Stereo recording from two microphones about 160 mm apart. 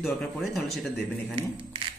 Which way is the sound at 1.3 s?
35° right (ahead or behind).